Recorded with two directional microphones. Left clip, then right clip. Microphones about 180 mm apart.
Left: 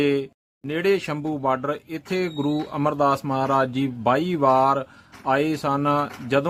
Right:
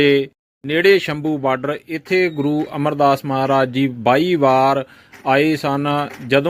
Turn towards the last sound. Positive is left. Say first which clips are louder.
# right 5 dB
turn(degrees=-15)  # may be behind; listen again after turning